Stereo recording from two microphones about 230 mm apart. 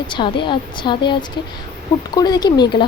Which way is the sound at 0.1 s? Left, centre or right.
Left.